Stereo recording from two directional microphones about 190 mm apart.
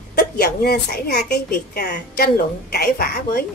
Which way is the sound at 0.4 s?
55° left (ahead or behind).